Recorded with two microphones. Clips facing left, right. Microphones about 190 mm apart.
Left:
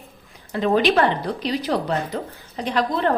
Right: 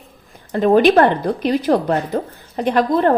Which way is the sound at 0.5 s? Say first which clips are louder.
Right 6 dB; 45° right (ahead or behind).